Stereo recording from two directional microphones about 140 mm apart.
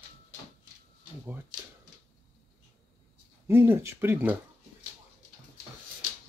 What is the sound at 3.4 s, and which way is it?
Speech, 15° right (ahead or behind).